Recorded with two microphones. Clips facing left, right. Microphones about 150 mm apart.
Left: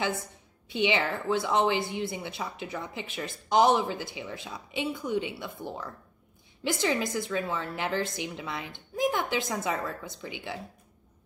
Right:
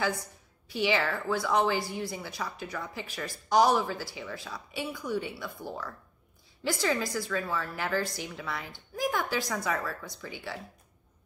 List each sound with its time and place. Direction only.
0.7 s a woman's voice: 20° left (ahead or behind)